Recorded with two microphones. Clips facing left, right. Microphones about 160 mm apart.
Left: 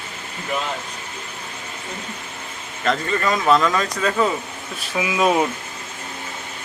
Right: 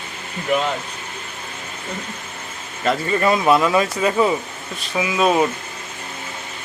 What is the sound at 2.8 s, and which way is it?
Speech, 10° right (ahead or behind).